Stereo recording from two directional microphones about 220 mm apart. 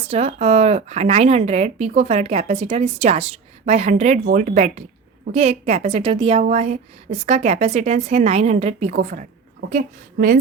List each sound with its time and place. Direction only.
0.1 s a woman's voice: 30° right (ahead or behind)